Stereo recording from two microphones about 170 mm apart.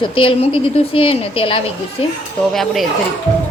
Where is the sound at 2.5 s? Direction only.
Centre (ahead or behind).